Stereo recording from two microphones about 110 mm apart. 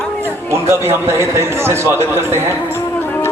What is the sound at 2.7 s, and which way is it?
Music, 20° left (ahead or behind).